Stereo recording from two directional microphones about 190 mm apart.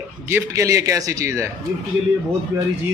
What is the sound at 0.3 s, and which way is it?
Speech, 15° right (ahead or behind).